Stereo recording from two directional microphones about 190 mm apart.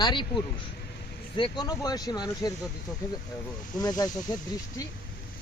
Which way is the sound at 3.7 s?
20° left (ahead or behind).